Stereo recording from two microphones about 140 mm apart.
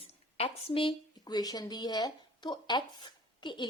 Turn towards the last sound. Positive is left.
turn(degrees=35)  # may be behind; listen again after turning